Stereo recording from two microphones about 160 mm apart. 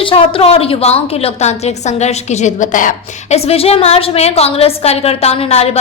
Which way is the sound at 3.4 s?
40° left (ahead or behind).